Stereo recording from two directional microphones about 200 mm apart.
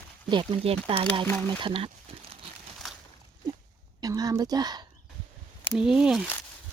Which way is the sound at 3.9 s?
20° right (ahead or behind).